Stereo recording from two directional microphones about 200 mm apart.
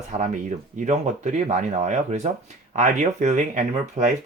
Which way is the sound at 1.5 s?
40° right (ahead or behind).